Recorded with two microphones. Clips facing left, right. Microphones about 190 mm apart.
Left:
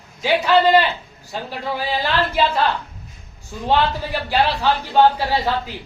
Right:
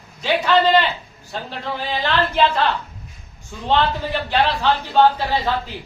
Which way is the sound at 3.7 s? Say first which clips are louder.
Even; 10° left (ahead or behind).